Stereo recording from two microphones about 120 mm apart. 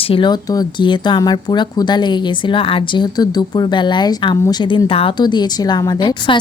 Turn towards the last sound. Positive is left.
turn(degrees=35)  # may be behind; listen again after turning